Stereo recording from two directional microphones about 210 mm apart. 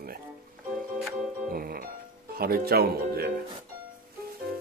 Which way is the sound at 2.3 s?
45° right (ahead or behind).